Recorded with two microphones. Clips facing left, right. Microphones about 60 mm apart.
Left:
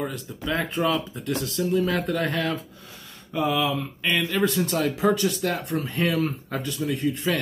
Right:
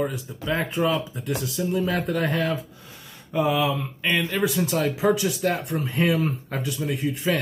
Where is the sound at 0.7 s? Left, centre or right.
Centre.